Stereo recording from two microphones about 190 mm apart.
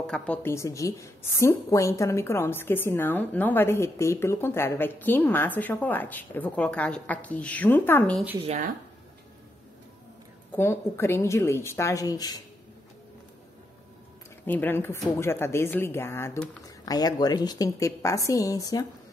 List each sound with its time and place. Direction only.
0.0 s a woman's voice: 5° left (ahead or behind)
10.5 s a woman's voice: 15° left (ahead or behind)
14.4 s a woman's voice: 10° left (ahead or behind)